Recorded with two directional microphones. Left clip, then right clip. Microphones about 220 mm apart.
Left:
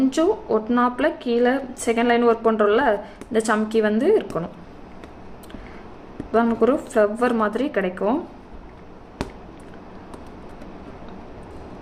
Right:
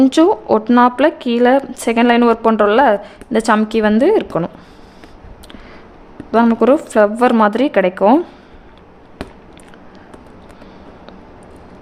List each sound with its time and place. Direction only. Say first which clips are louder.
0.0 s speech: right 8 dB; 45° right (ahead or behind)
6.3 s speech: right 7 dB; 40° right (ahead or behind)